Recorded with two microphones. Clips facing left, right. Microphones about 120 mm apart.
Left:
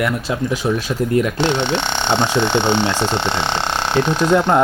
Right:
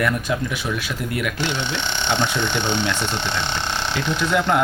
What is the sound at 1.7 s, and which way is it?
Speech, 50° left (ahead or behind).